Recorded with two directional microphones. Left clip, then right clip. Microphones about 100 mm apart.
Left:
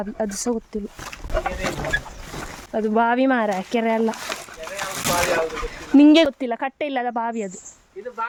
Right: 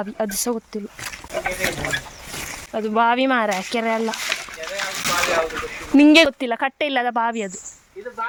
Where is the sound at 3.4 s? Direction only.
45° left (ahead or behind).